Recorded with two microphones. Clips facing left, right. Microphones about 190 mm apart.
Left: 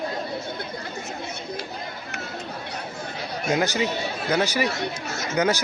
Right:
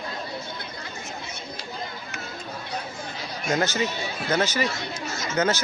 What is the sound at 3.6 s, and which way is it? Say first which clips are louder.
Speech: left 2 dB; 15° left (ahead or behind).